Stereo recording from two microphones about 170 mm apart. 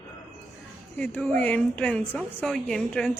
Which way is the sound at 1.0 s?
5° left (ahead or behind).